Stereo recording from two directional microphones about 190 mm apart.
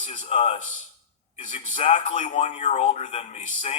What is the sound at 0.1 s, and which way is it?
Speech, 30° left (ahead or behind).